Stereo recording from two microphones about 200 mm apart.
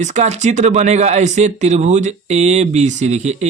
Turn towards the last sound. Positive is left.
turn(degrees=-35)  # may be behind; listen again after turning